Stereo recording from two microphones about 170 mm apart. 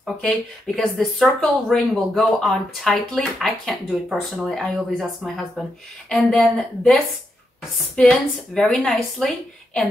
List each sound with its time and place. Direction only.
0.0 s speech: centre (ahead or behind)